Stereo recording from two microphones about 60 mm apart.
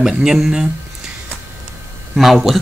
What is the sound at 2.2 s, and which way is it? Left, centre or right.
Speech, centre.